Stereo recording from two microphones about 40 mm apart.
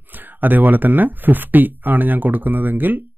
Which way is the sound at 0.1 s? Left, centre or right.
Right.